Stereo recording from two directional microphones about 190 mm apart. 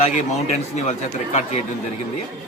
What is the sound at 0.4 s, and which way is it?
Speech, 35° left (ahead or behind).